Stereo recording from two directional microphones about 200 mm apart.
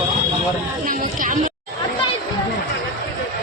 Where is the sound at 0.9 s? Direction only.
40° right (ahead or behind).